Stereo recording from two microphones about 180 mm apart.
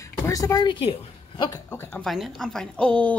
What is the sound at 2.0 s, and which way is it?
A woman's voice, centre (ahead or behind).